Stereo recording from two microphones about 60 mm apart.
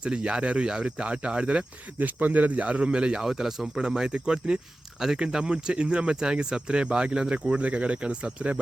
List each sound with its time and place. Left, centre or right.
0.0 s speech: centre
3.2 s speech: centre; by 8.6 s right